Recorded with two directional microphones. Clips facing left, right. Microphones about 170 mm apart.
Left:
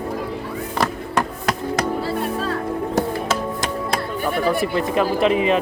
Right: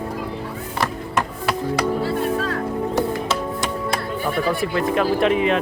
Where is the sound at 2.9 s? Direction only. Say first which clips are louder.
Left 2 dB; 45° left (ahead or behind).